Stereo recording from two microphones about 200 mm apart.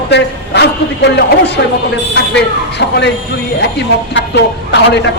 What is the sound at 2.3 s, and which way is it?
A man's voice, 60° left (ahead or behind).